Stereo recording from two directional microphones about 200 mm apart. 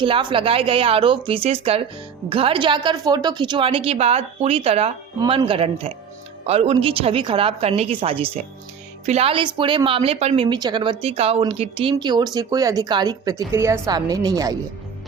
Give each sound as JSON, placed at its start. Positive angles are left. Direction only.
{"t": 0.0, "sound": "speech", "side_deg": -25}